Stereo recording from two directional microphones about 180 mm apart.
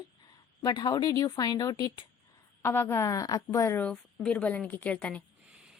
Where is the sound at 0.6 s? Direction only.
25° left (ahead or behind).